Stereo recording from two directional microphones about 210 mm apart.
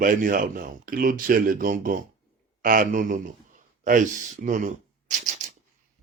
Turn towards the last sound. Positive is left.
turn(degrees=-35)  # may be behind; listen again after turning